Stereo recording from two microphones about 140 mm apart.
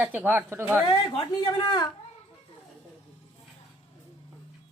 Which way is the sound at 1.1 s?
35° left (ahead or behind).